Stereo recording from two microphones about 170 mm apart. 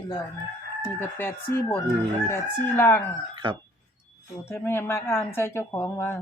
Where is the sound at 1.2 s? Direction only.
10° left (ahead or behind).